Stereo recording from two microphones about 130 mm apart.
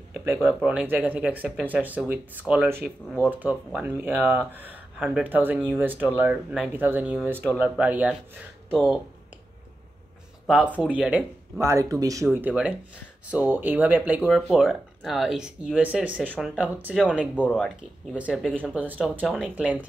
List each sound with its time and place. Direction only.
0.3 s speech: 15° right (ahead or behind)
6.7 s speech: 15° right (ahead or behind)
10.4 s speech: centre (ahead or behind)
11.6 s speech: 25° right (ahead or behind)
12.3 s speech: 10° right (ahead or behind)
14.2 s speech: centre (ahead or behind)
17.4 s speech: 5° left (ahead or behind)
18.1 s speech: 10° right (ahead or behind)